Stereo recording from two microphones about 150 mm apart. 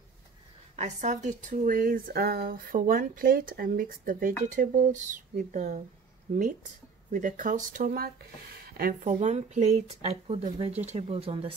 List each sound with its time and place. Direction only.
0.7 s speech: 50° right (ahead or behind)
7.1 s speech: 60° right (ahead or behind); by 11.5 s 40° right (ahead or behind)